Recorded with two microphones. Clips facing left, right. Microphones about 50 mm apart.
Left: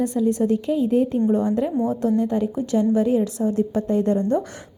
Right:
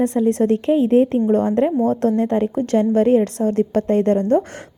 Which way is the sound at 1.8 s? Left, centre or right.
Right.